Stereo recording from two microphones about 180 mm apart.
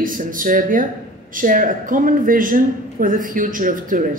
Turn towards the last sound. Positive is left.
turn(degrees=-50)  # may be behind; listen again after turning